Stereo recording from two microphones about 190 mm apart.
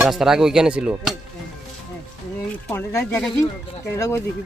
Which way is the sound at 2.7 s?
10° left (ahead or behind).